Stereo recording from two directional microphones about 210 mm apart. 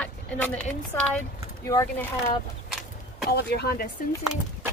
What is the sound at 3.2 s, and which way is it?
Speech, 50° left (ahead or behind).